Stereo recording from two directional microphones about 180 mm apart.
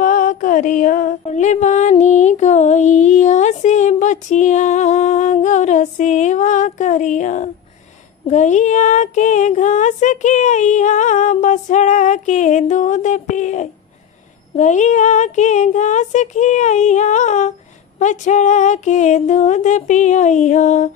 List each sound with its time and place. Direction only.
0.0 s music: 45° left (ahead or behind)
8.3 s a sound: 40° left (ahead or behind)
14.5 s music: 40° left (ahead or behind)